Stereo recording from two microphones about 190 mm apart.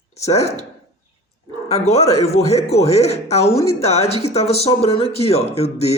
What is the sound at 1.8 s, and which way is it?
Speech, 35° left (ahead or behind).